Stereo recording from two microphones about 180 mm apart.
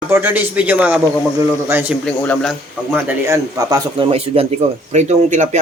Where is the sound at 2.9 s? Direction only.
15° right (ahead or behind); by 5.6 s 40° right (ahead or behind).